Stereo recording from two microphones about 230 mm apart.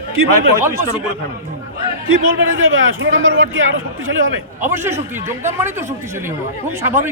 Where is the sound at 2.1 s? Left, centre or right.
Right.